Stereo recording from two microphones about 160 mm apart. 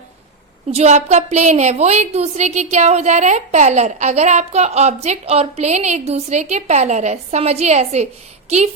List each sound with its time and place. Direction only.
0.7 s a woman's voice: 45° right (ahead or behind)